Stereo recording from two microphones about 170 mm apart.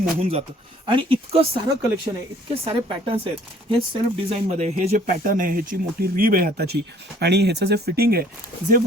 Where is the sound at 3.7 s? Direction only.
30° right (ahead or behind).